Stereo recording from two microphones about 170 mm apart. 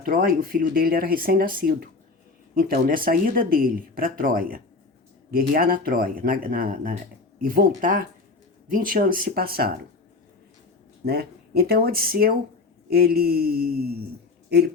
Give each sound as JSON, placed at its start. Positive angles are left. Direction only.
{"t": 0.0, "sound": "speech", "side_deg": -60}
{"t": 11.0, "sound": "speech", "side_deg": -65}